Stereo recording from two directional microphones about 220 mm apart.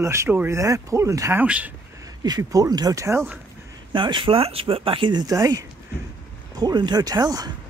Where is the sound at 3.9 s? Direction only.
20° right (ahead or behind).